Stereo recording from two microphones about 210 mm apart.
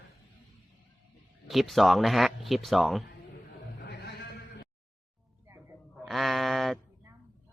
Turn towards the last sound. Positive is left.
turn(degrees=0)  # may be behind; listen again after turning